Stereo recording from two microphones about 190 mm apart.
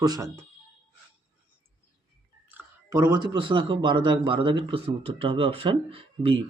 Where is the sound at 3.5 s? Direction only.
25° right (ahead or behind).